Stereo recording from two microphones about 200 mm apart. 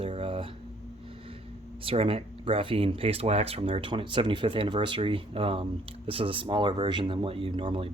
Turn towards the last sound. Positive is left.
turn(degrees=-25)  # may be behind; listen again after turning